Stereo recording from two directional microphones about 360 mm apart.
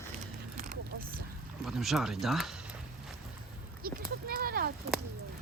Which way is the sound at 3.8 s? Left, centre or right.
Right.